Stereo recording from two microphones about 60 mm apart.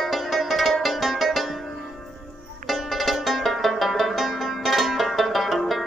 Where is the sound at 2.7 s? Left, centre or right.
Centre.